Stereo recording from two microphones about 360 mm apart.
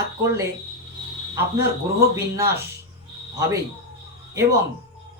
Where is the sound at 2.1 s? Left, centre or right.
Centre.